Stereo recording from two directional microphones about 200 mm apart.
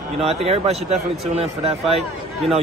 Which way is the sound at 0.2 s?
30° right (ahead or behind).